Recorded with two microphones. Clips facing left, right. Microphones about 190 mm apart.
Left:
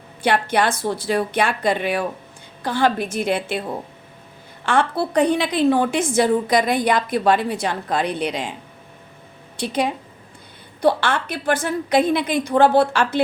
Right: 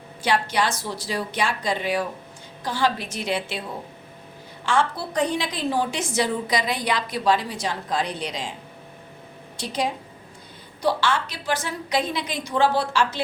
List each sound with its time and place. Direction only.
0.2 s a woman's voice: 55° left (ahead or behind)
4.6 s a woman's voice: 60° left (ahead or behind)
9.6 s a woman's voice: 60° left (ahead or behind)